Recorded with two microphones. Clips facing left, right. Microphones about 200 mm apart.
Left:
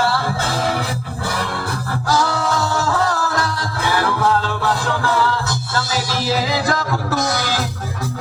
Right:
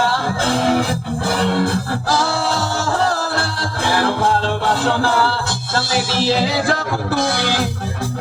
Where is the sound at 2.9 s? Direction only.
30° right (ahead or behind).